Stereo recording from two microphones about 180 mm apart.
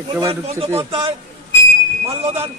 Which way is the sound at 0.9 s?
30° right (ahead or behind).